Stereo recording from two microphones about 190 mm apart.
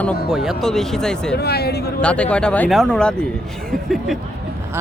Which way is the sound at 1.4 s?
55° left (ahead or behind).